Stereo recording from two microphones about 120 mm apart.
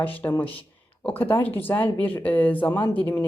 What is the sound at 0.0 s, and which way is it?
A woman's voice, 15° left (ahead or behind).